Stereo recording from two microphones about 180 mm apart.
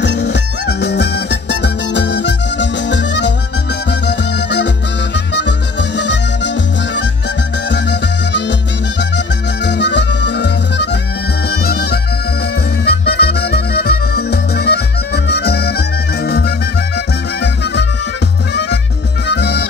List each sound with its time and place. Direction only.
0.0 s music: 75° left (ahead or behind)
5.3 s music: 75° left (ahead or behind)
9.7 s music: 75° left (ahead or behind)
15.2 s harmonica: 65° left (ahead or behind)
16.3 s music: 60° left (ahead or behind)
18.5 s music: 70° left (ahead or behind)